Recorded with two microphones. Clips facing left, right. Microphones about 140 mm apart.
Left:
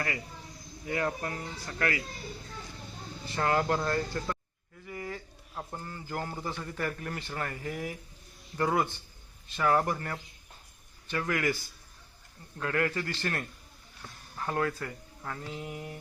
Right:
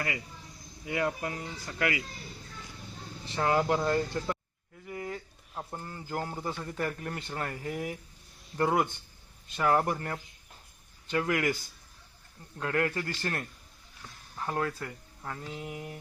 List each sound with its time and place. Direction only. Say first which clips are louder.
0.9 s speech: right 1 dB; 15° right (ahead or behind)
3.3 s speech: right 1 dB; 5° right (ahead or behind)
4.9 s a sound: right 1 dB; 20° right (ahead or behind)
5.7 s speech: right 1 dB; 15° right (ahead or behind)
12.5 s speech: even; 20° right (ahead or behind)
13.0 s speech: even; 15° right (ahead or behind)
15.5 s mantra: even; centre (ahead or behind)